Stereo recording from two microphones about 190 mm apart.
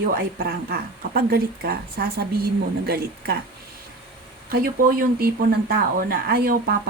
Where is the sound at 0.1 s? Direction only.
50° right (ahead or behind).